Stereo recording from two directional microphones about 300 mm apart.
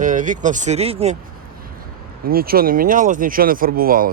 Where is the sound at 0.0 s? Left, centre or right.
Right.